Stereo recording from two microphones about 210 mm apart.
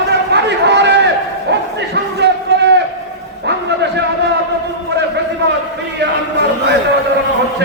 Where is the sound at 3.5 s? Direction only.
55° right (ahead or behind).